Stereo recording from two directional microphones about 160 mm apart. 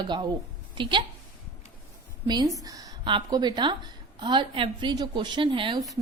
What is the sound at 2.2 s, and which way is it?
A woman's voice, 25° right (ahead or behind).